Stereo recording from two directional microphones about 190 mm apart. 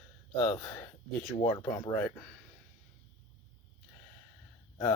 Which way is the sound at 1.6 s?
10° left (ahead or behind).